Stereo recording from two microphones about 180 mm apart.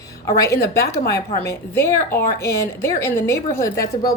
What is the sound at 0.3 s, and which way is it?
A woman's voice, 15° left (ahead or behind).